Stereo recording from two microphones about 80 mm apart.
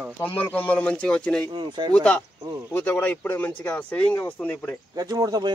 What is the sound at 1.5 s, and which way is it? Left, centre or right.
Speech, right.